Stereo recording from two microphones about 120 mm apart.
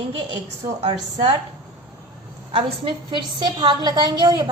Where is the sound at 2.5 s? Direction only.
40° right (ahead or behind).